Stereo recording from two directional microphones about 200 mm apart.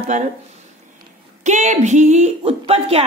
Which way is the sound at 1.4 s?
35° right (ahead or behind).